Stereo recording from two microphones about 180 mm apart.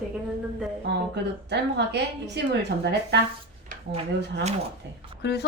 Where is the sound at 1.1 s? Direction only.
70° right (ahead or behind).